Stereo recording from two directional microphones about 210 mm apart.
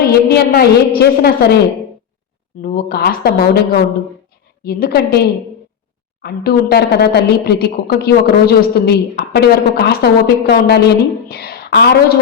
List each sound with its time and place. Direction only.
0.0 s a woman's voice: 50° left (ahead or behind)
2.6 s a woman's voice: 45° left (ahead or behind)
4.6 s a woman's voice: 50° left (ahead or behind)
6.2 s a woman's voice: 50° left (ahead or behind)